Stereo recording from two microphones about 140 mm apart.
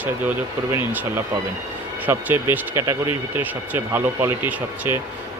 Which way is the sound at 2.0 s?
15° right (ahead or behind).